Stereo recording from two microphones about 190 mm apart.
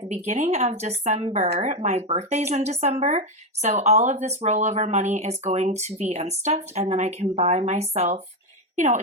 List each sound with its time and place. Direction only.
0.1 s speech: 35° right (ahead or behind)